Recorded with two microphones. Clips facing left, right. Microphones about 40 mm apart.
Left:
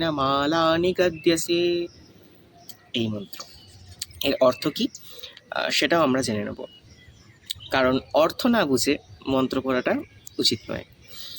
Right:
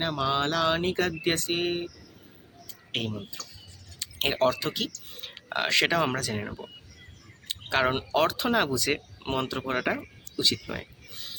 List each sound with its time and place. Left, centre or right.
0.0 s speech: centre
2.9 s speech: centre
4.3 s speech: centre
7.7 s speech: centre
7.9 s speech: right; by 10.1 s centre
10.5 s a sound: centre